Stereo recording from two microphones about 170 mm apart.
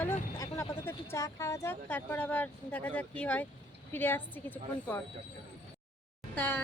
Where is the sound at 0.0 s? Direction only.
15° left (ahead or behind).